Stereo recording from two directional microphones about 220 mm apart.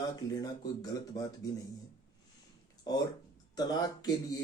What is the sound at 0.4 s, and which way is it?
Speech, 15° left (ahead or behind).